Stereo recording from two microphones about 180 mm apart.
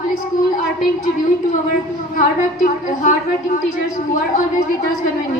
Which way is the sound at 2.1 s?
45° left (ahead or behind).